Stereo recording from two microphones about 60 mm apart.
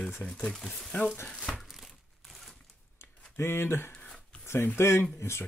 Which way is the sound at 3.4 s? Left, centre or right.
Left.